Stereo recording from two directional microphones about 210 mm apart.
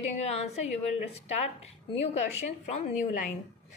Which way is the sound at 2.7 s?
35° left (ahead or behind).